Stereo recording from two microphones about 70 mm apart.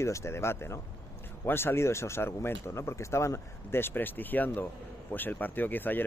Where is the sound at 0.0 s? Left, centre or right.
Left.